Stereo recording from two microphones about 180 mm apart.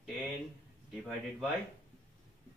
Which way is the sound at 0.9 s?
Centre (ahead or behind).